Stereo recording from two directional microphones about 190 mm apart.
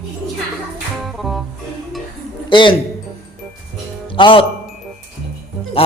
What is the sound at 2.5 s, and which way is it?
Speech, 25° left (ahead or behind).